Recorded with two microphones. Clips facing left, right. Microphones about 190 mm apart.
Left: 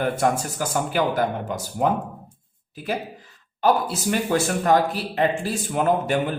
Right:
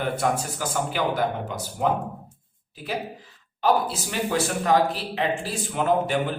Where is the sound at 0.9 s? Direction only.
45° left (ahead or behind).